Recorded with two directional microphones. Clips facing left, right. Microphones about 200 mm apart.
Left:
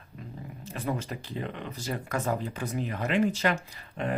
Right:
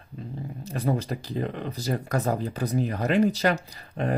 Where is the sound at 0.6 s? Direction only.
40° right (ahead or behind).